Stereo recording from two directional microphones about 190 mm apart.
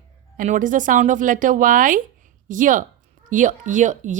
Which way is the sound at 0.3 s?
45° right (ahead or behind).